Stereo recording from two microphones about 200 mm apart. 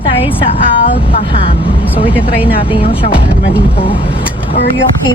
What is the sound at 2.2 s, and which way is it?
Speech, 25° left (ahead or behind).